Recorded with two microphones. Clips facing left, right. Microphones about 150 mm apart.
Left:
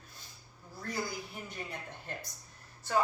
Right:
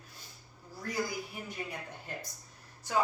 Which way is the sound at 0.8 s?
10° right (ahead or behind).